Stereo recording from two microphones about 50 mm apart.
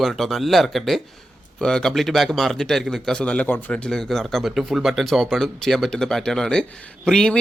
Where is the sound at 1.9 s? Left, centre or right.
Centre.